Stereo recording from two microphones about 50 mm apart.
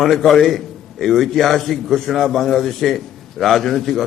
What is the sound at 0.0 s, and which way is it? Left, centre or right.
A man's voice, centre.